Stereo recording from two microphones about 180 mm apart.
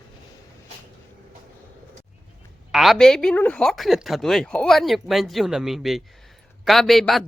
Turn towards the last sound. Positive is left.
turn(degrees=0)  # may be behind; listen again after turning